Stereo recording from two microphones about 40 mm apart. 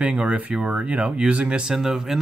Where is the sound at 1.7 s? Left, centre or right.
Centre.